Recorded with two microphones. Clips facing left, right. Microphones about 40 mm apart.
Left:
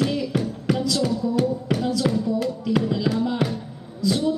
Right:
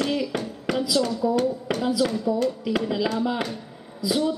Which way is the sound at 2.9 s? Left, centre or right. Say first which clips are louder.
Left 1 dB; centre.